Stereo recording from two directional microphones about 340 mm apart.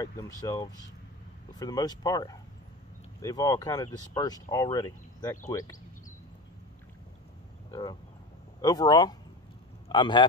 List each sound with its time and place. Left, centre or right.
0.0 s speech: centre
7.7 s a man's voice: centre